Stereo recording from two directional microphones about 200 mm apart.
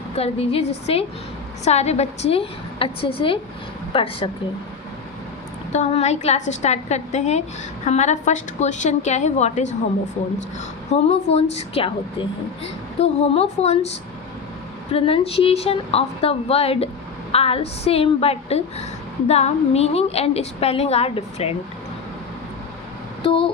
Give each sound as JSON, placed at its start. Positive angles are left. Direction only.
{"t": 0.2, "sound": "a woman's voice", "side_deg": 30}
{"t": 5.7, "sound": "a woman's voice", "side_deg": 35}
{"t": 10.9, "sound": "a woman's voice", "side_deg": 30}
{"t": 14.9, "sound": "a woman's voice", "side_deg": 30}